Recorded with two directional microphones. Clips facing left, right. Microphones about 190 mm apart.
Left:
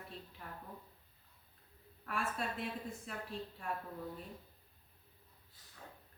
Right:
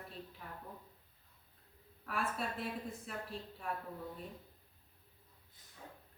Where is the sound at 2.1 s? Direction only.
Centre (ahead or behind).